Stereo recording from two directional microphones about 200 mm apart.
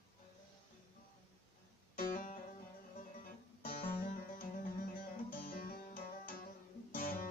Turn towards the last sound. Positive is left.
turn(degrees=45)  # may be behind; listen again after turning